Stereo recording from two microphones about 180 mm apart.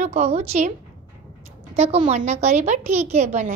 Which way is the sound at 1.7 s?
35° right (ahead or behind).